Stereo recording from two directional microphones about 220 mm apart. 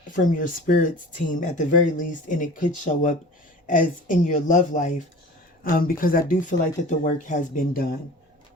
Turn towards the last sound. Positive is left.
turn(degrees=40)  # may be behind; listen again after turning